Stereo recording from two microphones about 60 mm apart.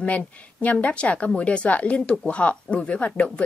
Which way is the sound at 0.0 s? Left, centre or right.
Left.